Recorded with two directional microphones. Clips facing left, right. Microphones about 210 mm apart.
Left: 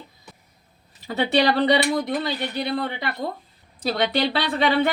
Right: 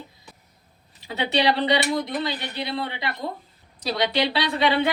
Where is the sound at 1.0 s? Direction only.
50° left (ahead or behind).